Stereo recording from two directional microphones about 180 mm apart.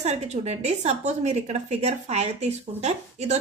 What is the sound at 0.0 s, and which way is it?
A woman's voice, 40° right (ahead or behind).